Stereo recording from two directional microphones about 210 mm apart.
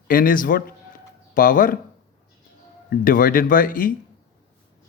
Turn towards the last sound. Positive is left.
turn(degrees=40)  # may be behind; listen again after turning